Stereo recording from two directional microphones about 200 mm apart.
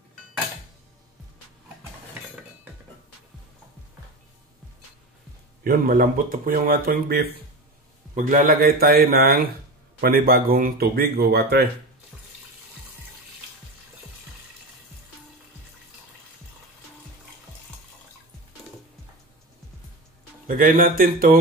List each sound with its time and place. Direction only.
5.6 s speech: 45° right (ahead or behind)
20.4 s speech: 45° right (ahead or behind)